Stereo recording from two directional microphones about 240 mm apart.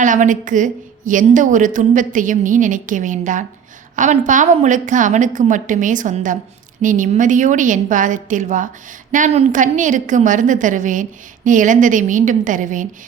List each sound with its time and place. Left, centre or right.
0.0 s a woman's voice: right